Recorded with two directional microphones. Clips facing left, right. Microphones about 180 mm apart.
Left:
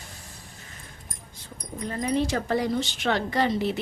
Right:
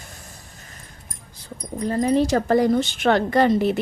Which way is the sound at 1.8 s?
40° right (ahead or behind).